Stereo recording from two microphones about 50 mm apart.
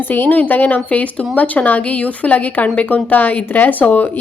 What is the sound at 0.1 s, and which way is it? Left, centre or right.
Speech, left.